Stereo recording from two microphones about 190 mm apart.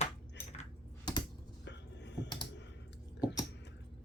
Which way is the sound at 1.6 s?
65° left (ahead or behind).